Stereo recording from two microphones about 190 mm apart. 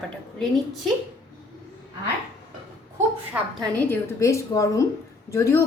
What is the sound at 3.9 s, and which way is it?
Speech, 15° left (ahead or behind).